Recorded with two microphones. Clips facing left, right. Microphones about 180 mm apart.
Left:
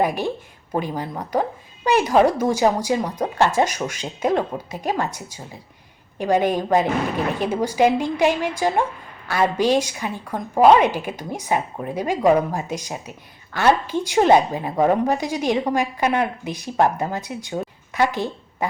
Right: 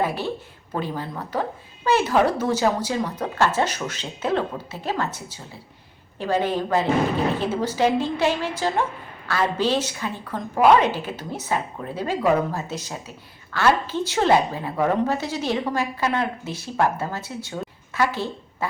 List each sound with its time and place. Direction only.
0.0 s a woman's voice: 15° left (ahead or behind)